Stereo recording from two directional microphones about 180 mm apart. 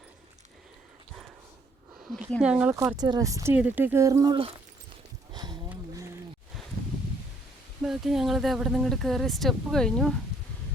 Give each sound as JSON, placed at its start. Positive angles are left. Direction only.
{"t": 2.4, "sound": "speech", "side_deg": -5}
{"t": 5.3, "sound": "a sound", "side_deg": -25}
{"t": 7.8, "sound": "speech", "side_deg": 0}